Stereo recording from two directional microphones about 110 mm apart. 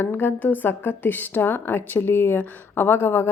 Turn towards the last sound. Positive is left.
turn(degrees=20)  # may be behind; listen again after turning